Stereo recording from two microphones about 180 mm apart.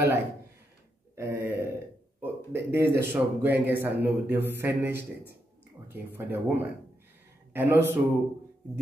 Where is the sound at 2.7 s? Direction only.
15° right (ahead or behind).